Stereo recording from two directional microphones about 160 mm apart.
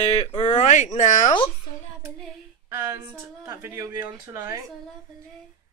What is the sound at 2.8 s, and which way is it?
Speech, 20° right (ahead or behind).